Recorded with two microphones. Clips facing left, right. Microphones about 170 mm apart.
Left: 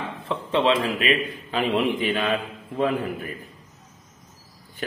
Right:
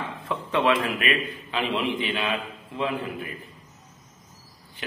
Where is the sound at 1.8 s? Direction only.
45° left (ahead or behind).